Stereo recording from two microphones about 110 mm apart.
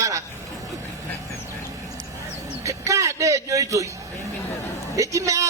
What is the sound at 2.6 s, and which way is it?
A man's voice, 30° right (ahead or behind).